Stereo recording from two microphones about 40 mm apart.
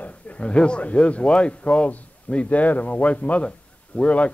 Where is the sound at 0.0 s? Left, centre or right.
Left.